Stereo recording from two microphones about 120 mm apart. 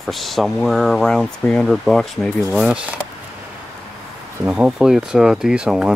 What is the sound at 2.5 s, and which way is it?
Speech, 10° right (ahead or behind).